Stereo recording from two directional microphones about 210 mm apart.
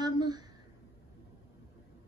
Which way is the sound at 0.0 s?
20° right (ahead or behind).